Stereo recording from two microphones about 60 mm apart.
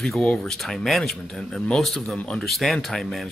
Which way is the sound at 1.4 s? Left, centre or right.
Centre.